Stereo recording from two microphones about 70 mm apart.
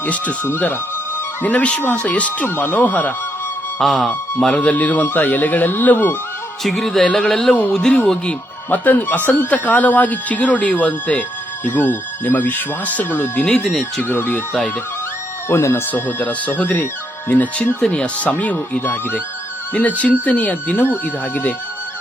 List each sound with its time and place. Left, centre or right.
0.0 s speech: left
3.8 s music: centre
4.4 s speech: centre
4.6 s speech: left
6.6 s music: centre
7.7 s speech: centre
13.7 s music: centre
14.0 s speech: left
15.4 s speech: left
15.9 s speech: left
17.7 s speech: centre